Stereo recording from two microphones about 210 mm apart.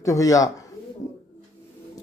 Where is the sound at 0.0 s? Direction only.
15° left (ahead or behind).